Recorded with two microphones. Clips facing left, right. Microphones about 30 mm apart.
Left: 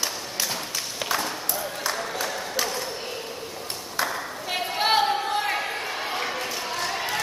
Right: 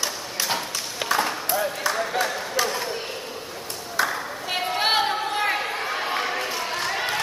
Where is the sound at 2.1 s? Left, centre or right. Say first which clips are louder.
Right 4 dB; right.